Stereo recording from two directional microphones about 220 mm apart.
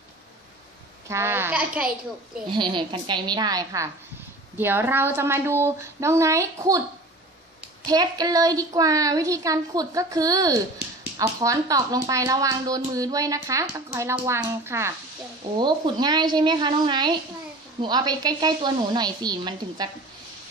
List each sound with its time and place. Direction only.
1.0 s speech: 10° right (ahead or behind)
2.5 s a woman's voice: 20° right (ahead or behind)
7.8 s a woman's voice: 15° right (ahead or behind)